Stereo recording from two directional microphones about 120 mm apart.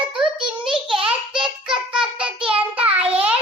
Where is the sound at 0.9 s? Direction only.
45° right (ahead or behind).